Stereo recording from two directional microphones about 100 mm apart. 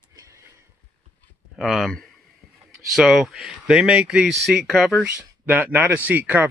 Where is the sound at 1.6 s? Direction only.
Centre (ahead or behind).